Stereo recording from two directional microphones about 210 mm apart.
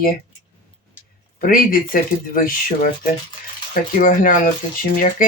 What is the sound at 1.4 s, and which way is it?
Speech, 40° left (ahead or behind).